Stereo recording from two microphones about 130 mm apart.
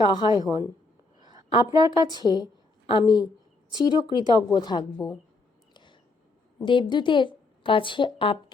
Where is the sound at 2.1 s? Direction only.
30° left (ahead or behind).